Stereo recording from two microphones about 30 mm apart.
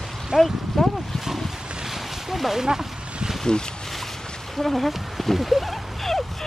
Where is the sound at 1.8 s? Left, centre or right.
Centre.